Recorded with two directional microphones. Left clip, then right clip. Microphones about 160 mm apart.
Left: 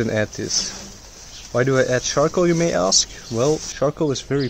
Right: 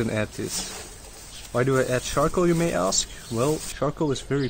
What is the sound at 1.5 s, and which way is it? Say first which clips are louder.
Speech: left 5 dB; 35° left (ahead or behind).